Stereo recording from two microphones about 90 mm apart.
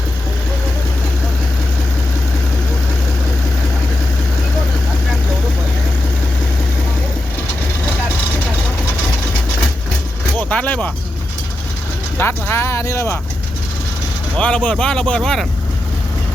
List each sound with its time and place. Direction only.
10.5 s speech: 15° left (ahead or behind)
12.1 s speech: 25° left (ahead or behind)
14.3 s speech: 15° left (ahead or behind)